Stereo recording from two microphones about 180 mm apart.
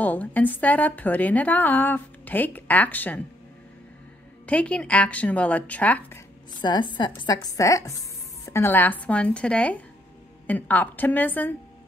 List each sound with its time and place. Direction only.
0.0 s a woman's voice: 10° left (ahead or behind)
4.5 s a woman's voice: 5° left (ahead or behind)
6.6 s a woman's voice: 25° left (ahead or behind)